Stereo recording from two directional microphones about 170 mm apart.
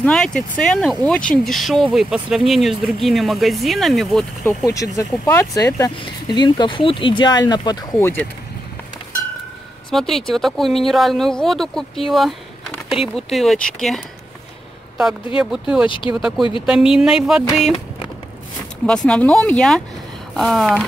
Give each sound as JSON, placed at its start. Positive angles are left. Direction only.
{"t": 0.0, "sound": "speech", "side_deg": 5}
{"t": 4.6, "sound": "speech", "side_deg": 20}
{"t": 9.8, "sound": "speech", "side_deg": 0}
{"t": 19.0, "sound": "speech", "side_deg": 5}